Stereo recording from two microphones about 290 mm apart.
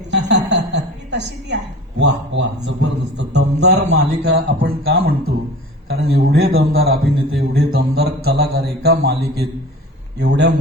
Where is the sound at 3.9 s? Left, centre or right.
Right.